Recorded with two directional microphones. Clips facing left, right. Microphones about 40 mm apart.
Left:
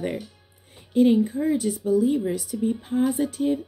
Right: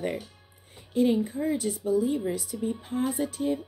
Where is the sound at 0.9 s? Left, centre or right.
Left.